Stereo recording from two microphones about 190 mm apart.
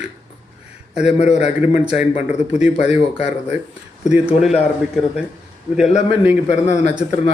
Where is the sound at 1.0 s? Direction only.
35° left (ahead or behind).